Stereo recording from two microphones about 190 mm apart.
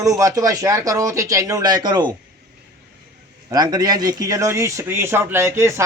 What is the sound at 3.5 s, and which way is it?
A man's voice, 20° right (ahead or behind).